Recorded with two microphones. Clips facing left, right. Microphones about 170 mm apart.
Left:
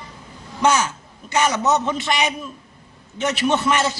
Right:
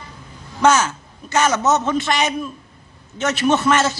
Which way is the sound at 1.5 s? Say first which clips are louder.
Right 2 dB; 45° right (ahead or behind).